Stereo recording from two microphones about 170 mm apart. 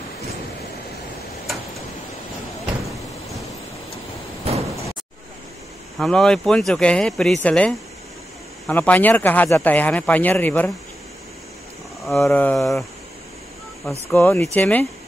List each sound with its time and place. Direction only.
4.5 s sliding door: 35° right (ahead or behind)
5.9 s speech: 5° left (ahead or behind)
12.1 s speech: 5° left (ahead or behind)
14.0 s speech: 10° left (ahead or behind)